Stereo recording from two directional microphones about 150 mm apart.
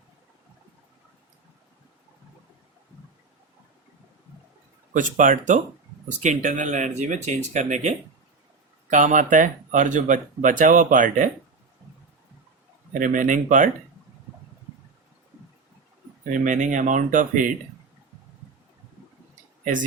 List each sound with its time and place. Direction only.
4.9 s speech: 60° right (ahead or behind)
12.9 s speech: 60° right (ahead or behind)
16.3 s speech: 60° right (ahead or behind)